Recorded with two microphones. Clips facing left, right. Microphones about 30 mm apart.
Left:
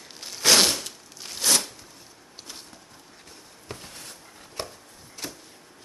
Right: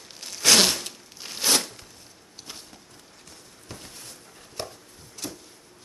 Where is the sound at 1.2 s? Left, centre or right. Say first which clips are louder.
Right 1 dB; centre.